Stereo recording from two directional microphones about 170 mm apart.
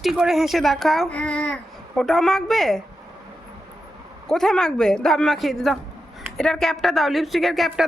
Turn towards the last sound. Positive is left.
turn(degrees=0)  # may be behind; listen again after turning